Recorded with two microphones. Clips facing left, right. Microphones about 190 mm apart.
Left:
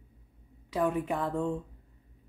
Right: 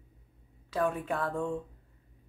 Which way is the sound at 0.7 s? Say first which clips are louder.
Left 2 dB; 15° left (ahead or behind).